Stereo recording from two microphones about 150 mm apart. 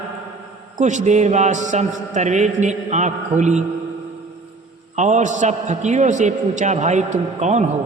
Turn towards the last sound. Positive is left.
turn(degrees=-50)  # may be behind; listen again after turning